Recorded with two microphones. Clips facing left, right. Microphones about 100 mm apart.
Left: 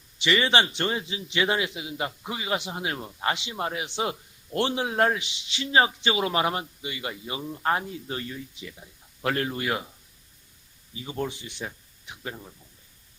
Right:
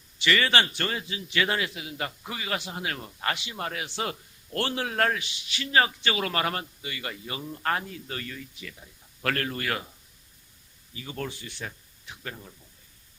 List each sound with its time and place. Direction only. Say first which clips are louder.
0.2 s a man's voice: left 1 dB; 20° left (ahead or behind)
10.9 s a man's voice: left 4 dB; 20° left (ahead or behind)